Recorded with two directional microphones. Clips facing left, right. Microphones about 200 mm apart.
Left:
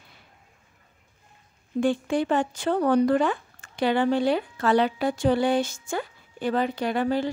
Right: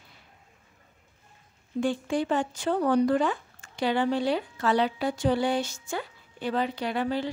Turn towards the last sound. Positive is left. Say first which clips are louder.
# left 4 dB
turn(degrees=45)  # may be behind; listen again after turning